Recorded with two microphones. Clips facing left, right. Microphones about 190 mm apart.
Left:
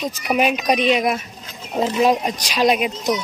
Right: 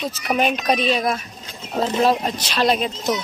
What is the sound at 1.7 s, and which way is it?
A woman's voice, 10° left (ahead or behind).